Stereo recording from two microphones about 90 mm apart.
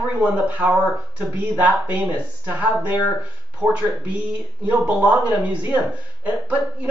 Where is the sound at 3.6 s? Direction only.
20° right (ahead or behind).